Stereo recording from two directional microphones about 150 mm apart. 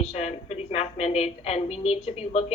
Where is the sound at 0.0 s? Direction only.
45° left (ahead or behind).